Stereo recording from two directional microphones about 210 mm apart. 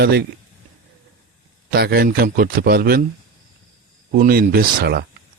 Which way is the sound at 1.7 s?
50° right (ahead or behind).